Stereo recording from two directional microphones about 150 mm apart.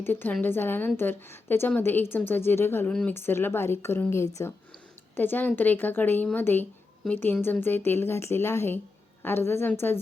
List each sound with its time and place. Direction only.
0.0 s a woman's voice: 10° left (ahead or behind)